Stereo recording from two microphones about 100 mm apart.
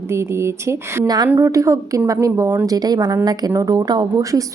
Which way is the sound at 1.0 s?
40° right (ahead or behind).